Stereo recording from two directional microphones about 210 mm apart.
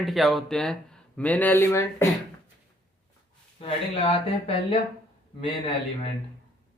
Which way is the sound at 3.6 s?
25° left (ahead or behind).